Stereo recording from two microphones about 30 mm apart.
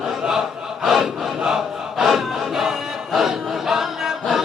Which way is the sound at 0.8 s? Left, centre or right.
Centre.